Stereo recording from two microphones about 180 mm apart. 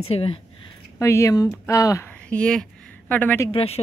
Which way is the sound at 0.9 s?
15° left (ahead or behind).